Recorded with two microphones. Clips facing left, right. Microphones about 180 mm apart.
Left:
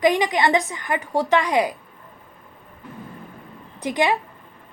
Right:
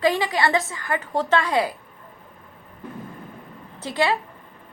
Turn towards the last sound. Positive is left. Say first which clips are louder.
# left 2 dB
turn(degrees=15)  # may be behind; listen again after turning